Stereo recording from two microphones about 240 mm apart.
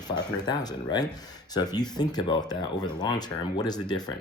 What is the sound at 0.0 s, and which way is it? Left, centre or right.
Speech, centre.